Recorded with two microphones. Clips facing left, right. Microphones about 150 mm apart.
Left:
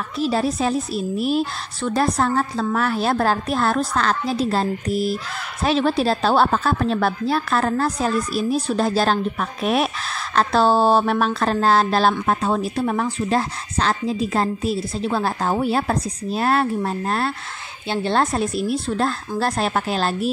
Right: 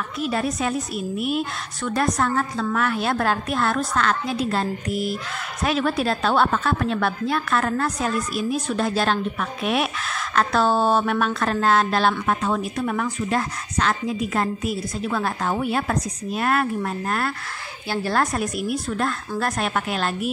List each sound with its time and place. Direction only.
0.2 s a woman's voice: 30° left (ahead or behind)